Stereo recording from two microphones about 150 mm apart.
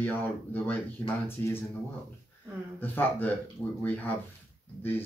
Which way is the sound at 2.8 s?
10° left (ahead or behind).